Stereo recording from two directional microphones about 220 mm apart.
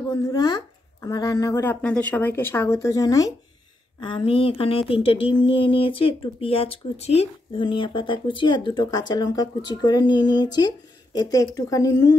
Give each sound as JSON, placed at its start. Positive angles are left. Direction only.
{"t": 0.1, "sound": "speech", "side_deg": 15}